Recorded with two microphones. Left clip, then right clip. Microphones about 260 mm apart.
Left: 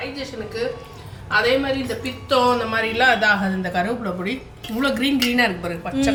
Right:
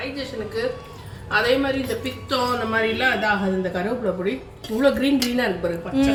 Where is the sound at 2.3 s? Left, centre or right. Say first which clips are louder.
Left 4 dB; left.